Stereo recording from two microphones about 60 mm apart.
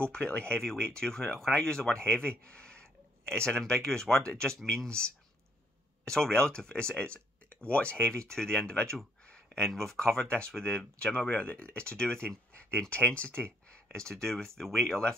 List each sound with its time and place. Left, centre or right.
0.0 s speech: centre
9.2 s a sound: centre
9.7 s speech: centre